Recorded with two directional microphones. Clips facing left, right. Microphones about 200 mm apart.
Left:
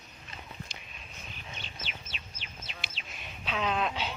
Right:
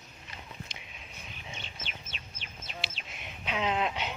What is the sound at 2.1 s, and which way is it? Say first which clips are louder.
Bird: even; 50° right (ahead or behind).